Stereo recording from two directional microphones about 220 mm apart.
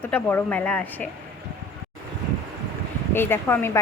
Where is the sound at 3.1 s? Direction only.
10° left (ahead or behind).